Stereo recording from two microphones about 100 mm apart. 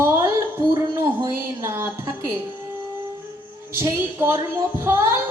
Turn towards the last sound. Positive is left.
turn(degrees=-25)  # may be behind; listen again after turning